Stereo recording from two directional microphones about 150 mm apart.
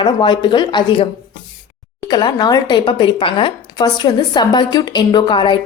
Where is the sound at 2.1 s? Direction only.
30° left (ahead or behind).